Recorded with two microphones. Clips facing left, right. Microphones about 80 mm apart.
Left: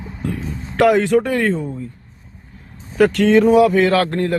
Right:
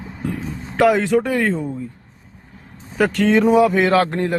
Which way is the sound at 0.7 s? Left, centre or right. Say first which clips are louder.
Left 2 dB; centre.